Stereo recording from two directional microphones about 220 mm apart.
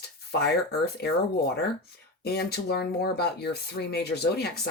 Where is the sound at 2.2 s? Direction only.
45° left (ahead or behind).